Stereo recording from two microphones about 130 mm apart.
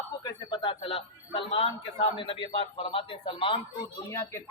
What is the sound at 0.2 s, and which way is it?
A man's voice, 35° left (ahead or behind).